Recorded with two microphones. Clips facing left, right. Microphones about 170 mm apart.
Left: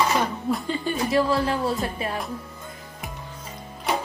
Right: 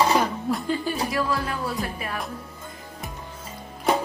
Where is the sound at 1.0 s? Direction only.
25° left (ahead or behind).